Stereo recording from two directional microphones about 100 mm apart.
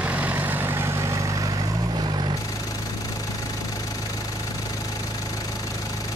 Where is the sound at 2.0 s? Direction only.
45° right (ahead or behind).